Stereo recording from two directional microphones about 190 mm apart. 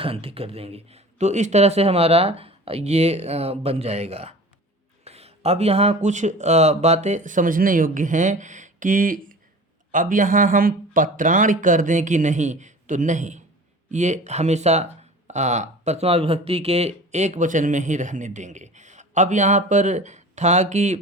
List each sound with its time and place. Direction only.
0.0 s speech: 30° right (ahead or behind)